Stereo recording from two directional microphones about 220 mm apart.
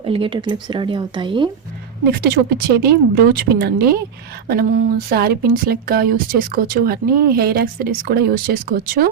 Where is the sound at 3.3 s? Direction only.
45° right (ahead or behind).